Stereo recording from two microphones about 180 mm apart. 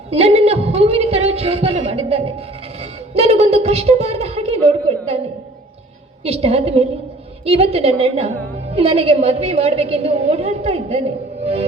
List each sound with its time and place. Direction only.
0.1 s a woman's voice: 35° right (ahead or behind)
6.2 s a woman's voice: 35° right (ahead or behind)